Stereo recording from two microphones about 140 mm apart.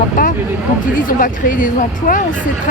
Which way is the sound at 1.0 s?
75° left (ahead or behind).